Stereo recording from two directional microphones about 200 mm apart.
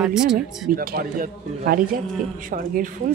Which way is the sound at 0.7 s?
45° right (ahead or behind).